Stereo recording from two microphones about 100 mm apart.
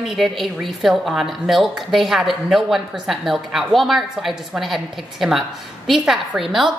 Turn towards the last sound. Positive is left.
turn(degrees=-5)  # may be behind; listen again after turning